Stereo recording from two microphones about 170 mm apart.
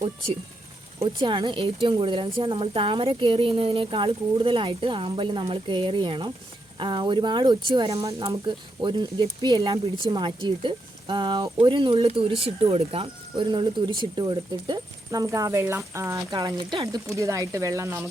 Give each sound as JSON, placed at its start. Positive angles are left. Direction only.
{"t": 0.9, "sound": "speech", "side_deg": -25}